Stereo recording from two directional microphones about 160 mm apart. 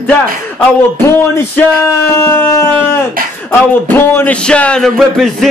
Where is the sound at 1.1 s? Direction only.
15° left (ahead or behind).